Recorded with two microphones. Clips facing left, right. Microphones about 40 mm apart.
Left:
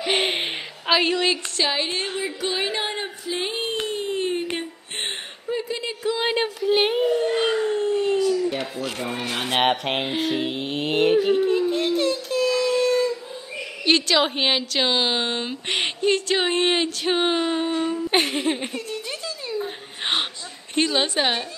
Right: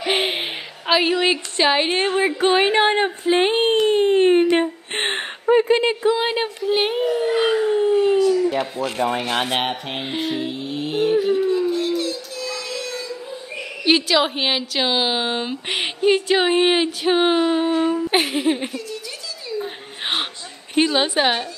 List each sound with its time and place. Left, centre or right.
0.1 s a sound: centre
1.6 s a woman's voice: right
2.0 s speech: right
3.8 s a sound: right
6.1 s speech: centre
8.5 s speech: right
9.2 s speech: right
9.7 s speech: left
10.0 s a woman's voice: centre
10.4 s a sound: left
13.8 s a woman's voice: centre
19.6 s chuckle: centre
20.7 s a woman's voice: centre